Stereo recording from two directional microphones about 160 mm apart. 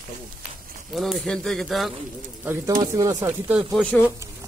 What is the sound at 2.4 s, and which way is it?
Speech, 15° right (ahead or behind).